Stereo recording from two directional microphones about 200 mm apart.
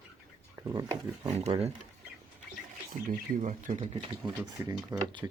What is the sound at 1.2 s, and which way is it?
Speech, 30° right (ahead or behind).